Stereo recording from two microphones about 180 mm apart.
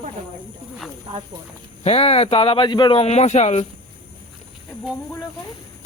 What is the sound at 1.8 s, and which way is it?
Speech, 35° left (ahead or behind).